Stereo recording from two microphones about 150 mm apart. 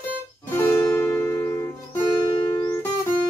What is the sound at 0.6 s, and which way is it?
Music, 15° left (ahead or behind).